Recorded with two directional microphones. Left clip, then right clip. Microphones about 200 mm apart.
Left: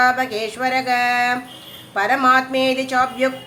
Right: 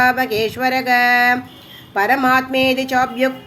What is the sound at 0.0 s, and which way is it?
Speech, 20° right (ahead or behind).